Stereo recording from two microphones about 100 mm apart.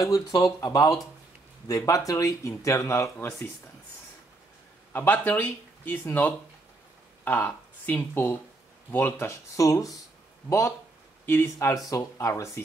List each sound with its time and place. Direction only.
0.0 s speech: 35° left (ahead or behind)
4.9 s speech: 20° left (ahead or behind); by 9.9 s 35° left (ahead or behind)
11.2 s speech: 25° left (ahead or behind)